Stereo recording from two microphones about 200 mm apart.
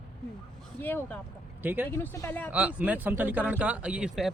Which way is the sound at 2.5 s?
5° right (ahead or behind).